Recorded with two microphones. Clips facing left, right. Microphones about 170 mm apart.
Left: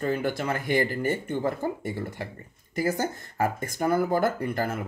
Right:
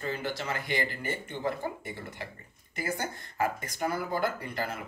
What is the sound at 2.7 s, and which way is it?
Speech, 40° left (ahead or behind).